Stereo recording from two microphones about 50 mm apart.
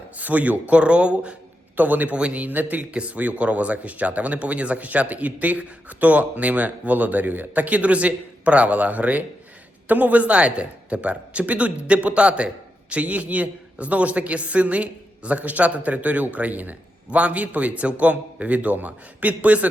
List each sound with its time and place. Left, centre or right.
0.2 s a man's voice: right
1.7 s speech: right
2.9 s a man's voice: right